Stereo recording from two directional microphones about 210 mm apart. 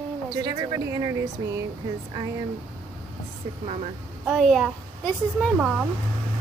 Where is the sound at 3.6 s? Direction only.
35° right (ahead or behind).